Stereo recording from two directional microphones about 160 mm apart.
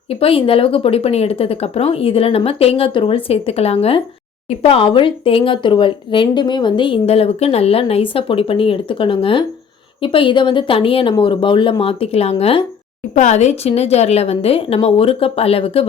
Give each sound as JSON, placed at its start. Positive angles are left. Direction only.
{"t": 0.1, "sound": "speech", "side_deg": 35}